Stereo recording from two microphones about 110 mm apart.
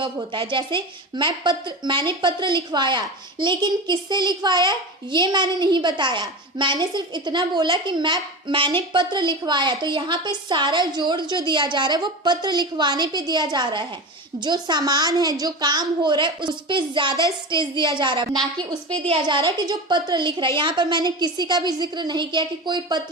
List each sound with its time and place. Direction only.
0.0 s a woman's voice: 50° right (ahead or behind)
19.0 s a woman's voice: 50° right (ahead or behind)